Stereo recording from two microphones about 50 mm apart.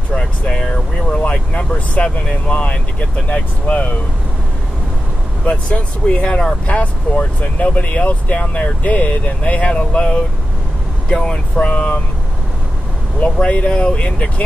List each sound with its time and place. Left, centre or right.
0.1 s speech: centre
5.4 s speech: left
13.4 s speech: left